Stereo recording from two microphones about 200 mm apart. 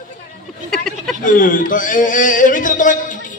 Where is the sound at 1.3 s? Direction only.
40° left (ahead or behind).